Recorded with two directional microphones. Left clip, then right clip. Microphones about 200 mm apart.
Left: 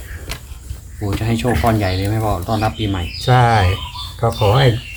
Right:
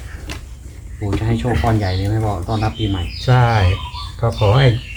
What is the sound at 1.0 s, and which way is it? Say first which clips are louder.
Speech: left 1 dB; 55° left (ahead or behind).